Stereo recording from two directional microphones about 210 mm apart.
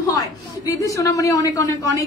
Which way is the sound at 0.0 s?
15° left (ahead or behind).